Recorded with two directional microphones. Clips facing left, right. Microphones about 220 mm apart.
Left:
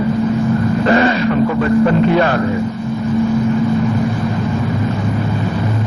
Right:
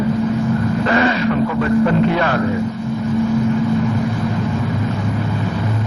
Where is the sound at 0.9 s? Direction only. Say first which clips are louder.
Left 4 dB; 35° left (ahead or behind).